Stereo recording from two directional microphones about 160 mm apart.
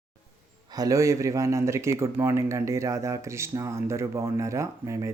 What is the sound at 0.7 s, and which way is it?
Speech, 20° right (ahead or behind).